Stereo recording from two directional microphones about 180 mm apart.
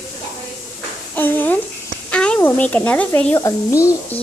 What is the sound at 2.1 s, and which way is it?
Speech, 5° left (ahead or behind).